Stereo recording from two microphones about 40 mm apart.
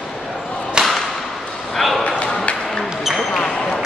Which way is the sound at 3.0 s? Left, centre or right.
Centre.